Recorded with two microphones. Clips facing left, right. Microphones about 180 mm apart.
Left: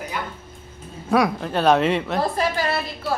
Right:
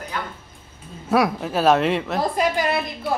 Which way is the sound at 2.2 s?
15° right (ahead or behind).